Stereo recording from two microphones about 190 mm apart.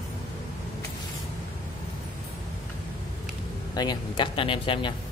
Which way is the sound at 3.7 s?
20° left (ahead or behind).